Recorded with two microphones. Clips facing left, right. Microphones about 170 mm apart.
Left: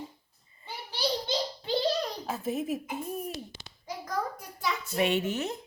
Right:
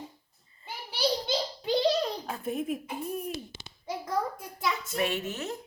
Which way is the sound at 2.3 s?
Centre (ahead or behind).